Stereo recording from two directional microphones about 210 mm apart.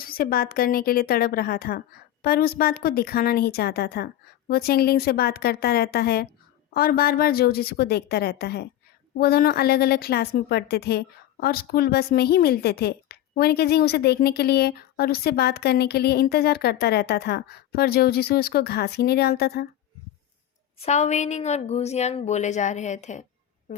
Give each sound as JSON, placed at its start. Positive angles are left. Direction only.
{"t": 0.0, "sound": "a woman's voice", "side_deg": 45}
{"t": 20.8, "sound": "a woman's voice", "side_deg": 35}